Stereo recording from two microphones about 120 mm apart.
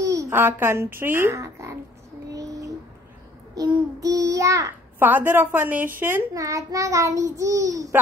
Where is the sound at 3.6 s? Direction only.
40° right (ahead or behind).